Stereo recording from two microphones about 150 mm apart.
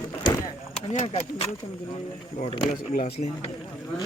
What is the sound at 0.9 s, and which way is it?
Speech, 45° left (ahead or behind).